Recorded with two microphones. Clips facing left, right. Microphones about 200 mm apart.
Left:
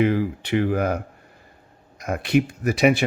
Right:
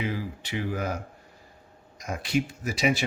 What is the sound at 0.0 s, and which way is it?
Speech, 60° left (ahead or behind).